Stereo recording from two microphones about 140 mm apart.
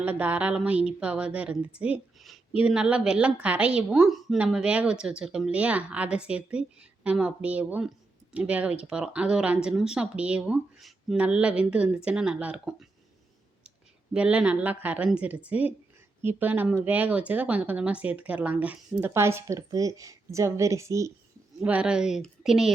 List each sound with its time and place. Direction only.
0.0 s a woman's voice: 10° right (ahead or behind)
21.6 s a woman's voice: 10° right (ahead or behind)